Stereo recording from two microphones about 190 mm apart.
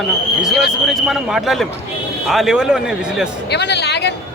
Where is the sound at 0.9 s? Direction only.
Centre (ahead or behind).